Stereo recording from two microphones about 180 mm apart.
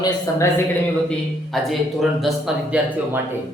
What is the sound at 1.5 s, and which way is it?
A man's voice, centre (ahead or behind).